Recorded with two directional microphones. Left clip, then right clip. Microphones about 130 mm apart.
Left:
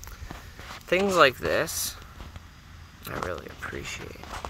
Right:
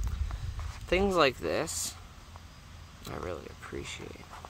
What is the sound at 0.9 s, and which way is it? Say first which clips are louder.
Speech: left 6 dB; centre (ahead or behind).